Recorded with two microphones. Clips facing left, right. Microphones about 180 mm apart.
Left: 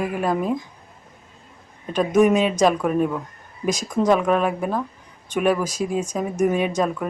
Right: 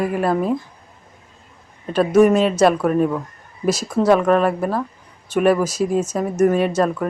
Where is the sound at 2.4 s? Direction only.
15° left (ahead or behind).